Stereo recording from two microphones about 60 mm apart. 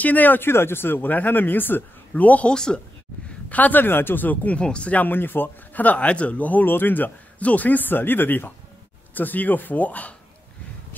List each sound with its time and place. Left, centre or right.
0.0 s speech: left
2.5 s speech: centre
3.3 s a man's voice: left